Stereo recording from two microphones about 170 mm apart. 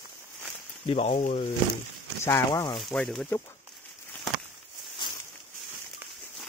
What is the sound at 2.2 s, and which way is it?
Speech, 15° left (ahead or behind).